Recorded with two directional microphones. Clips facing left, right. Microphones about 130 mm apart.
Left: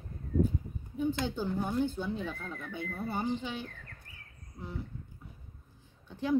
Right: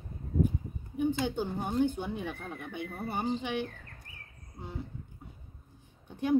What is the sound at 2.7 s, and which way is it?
Music, 20° right (ahead or behind).